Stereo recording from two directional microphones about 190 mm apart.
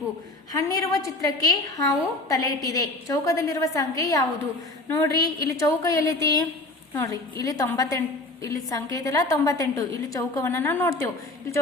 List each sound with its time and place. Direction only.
0.5 s a woman's voice: 15° left (ahead or behind)